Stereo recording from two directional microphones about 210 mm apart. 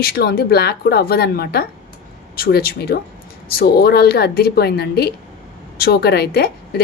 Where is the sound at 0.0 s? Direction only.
45° left (ahead or behind).